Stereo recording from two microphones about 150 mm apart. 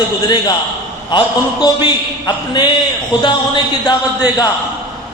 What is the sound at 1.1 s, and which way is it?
A man's voice, 30° left (ahead or behind).